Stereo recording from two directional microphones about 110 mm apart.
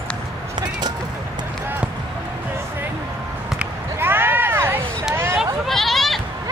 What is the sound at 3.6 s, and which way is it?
Basketball bounce, 20° right (ahead or behind).